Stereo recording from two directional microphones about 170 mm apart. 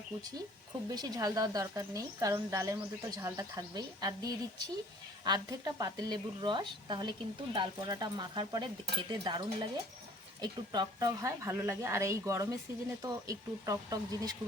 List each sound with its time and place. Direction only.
0.9 s a woman's voice: 25° right (ahead or behind)